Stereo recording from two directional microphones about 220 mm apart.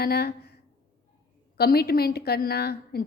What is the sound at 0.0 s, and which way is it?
Speech, 45° left (ahead or behind).